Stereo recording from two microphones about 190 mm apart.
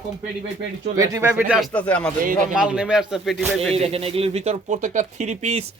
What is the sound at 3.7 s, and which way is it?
Speech, 30° right (ahead or behind).